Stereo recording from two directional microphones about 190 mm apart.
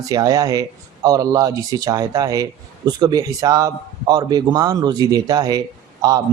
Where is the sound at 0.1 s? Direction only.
20° right (ahead or behind).